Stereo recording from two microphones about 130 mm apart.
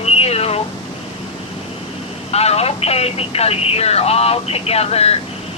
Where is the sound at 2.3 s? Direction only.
50° left (ahead or behind).